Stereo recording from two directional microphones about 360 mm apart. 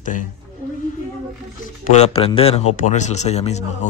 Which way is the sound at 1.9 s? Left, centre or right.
Centre.